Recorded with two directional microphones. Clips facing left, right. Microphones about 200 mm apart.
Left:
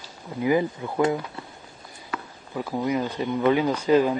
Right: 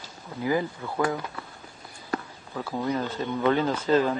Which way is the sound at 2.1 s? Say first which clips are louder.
Right 4 dB; 40° right (ahead or behind).